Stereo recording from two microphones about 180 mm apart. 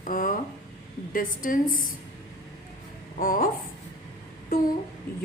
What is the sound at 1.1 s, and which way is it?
Speech, 50° left (ahead or behind).